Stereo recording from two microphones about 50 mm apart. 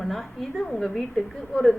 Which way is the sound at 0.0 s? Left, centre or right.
Centre.